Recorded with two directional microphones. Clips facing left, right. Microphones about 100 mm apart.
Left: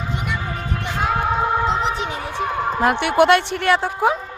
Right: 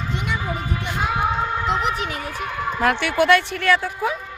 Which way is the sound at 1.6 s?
30° left (ahead or behind).